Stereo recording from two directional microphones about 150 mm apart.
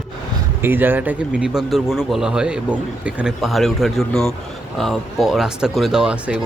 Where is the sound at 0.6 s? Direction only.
15° right (ahead or behind).